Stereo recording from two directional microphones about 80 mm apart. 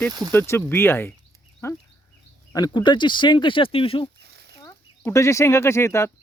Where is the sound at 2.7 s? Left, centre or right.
Left.